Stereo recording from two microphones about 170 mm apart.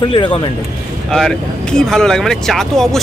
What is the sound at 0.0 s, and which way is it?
Speech, 30° left (ahead or behind).